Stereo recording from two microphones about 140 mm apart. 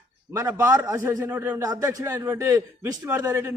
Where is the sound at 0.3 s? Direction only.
20° right (ahead or behind).